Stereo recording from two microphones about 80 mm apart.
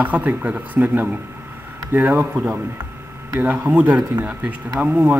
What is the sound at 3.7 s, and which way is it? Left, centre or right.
Speech, right.